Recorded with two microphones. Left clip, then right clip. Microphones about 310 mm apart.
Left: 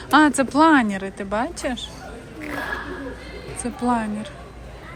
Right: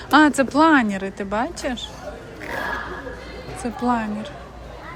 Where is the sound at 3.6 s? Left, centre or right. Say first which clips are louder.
Even; centre.